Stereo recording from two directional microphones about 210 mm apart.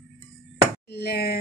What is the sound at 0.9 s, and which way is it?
Speech, 50° left (ahead or behind).